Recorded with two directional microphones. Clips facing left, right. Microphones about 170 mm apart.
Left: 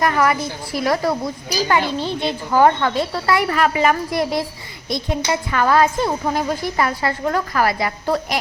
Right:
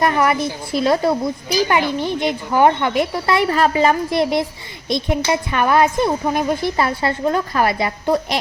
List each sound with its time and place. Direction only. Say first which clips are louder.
0.0 s speech: right 1 dB; 25° right (ahead or behind)